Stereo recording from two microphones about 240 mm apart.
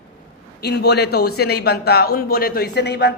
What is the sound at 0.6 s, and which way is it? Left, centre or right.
A woman's voice, left.